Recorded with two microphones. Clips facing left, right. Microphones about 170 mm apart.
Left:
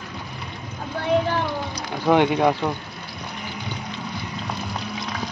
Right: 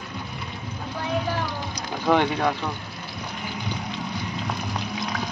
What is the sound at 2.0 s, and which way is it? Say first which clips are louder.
Speech: left 4 dB; 10° left (ahead or behind).